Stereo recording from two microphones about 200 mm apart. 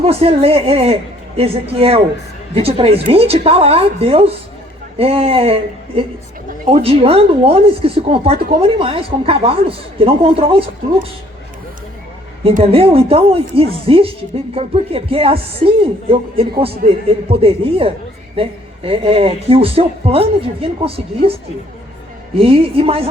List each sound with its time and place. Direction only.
0.0 s speech: 30° right (ahead or behind)
6.7 s speech: 30° right (ahead or behind)
12.4 s speech: 30° right (ahead or behind)
22.4 s speech: 30° right (ahead or behind)